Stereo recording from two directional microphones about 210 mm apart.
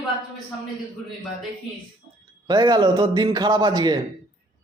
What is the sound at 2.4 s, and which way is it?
A man's voice, 20° right (ahead or behind).